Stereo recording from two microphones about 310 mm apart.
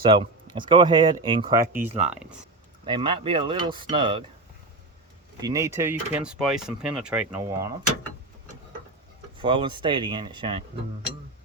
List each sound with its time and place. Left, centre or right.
0.0 s speech: centre
5.4 s speech: centre
9.4 s speech: centre